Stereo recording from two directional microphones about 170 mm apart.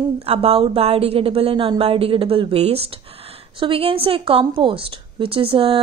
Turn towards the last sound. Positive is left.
turn(degrees=-30)  # may be behind; listen again after turning